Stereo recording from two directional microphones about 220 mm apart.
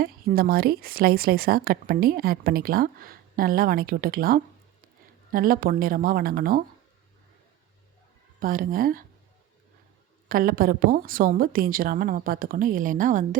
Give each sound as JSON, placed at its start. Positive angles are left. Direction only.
{"t": 0.0, "sound": "a woman's voice", "side_deg": -40}
{"t": 8.4, "sound": "a woman's voice", "side_deg": -40}
{"t": 10.2, "sound": "a woman's voice", "side_deg": -40}